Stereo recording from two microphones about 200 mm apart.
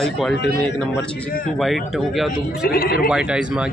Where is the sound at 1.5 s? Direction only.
Centre (ahead or behind).